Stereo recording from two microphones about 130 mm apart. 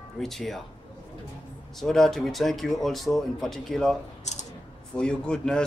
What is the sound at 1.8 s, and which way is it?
Speech, 5° left (ahead or behind).